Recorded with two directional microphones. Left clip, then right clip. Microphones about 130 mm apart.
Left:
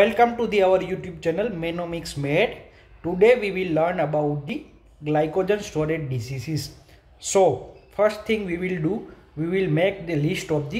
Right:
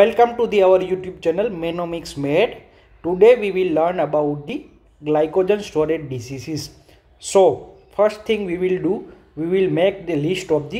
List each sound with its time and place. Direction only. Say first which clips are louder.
0.0 s speech: right 4 dB; 20° right (ahead or behind)